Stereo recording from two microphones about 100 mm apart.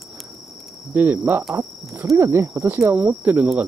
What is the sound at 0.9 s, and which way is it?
Cricket, 15° right (ahead or behind).